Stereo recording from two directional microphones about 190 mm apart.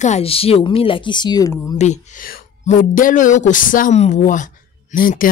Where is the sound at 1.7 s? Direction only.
35° left (ahead or behind).